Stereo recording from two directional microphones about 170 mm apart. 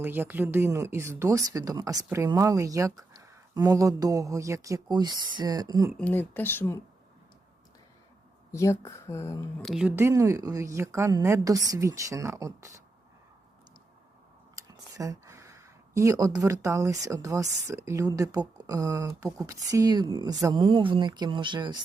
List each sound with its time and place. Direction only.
0.0 s a woman's voice: 10° right (ahead or behind)
5.9 s speech: 10° left (ahead or behind)
8.5 s speech: 15° left (ahead or behind)
9.6 s a woman's voice: 5° right (ahead or behind)
14.5 s speech: 20° right (ahead or behind)